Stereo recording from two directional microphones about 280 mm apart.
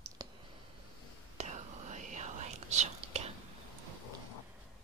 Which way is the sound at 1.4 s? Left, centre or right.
Right.